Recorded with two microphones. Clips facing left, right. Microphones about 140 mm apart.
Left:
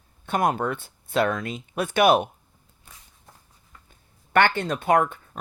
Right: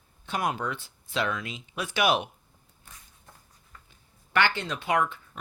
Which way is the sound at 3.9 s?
50° left (ahead or behind).